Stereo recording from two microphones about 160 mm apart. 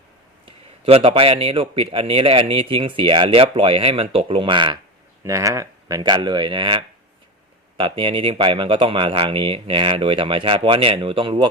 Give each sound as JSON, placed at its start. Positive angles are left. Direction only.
{"t": 0.4, "sound": "a man's voice", "side_deg": -35}
{"t": 5.2, "sound": "a man's voice", "side_deg": -20}